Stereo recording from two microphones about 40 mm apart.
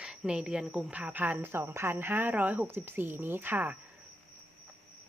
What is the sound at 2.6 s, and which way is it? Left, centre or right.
Speech, right.